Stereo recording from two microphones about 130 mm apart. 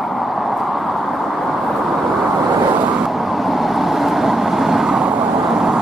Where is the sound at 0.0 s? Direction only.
Centre (ahead or behind).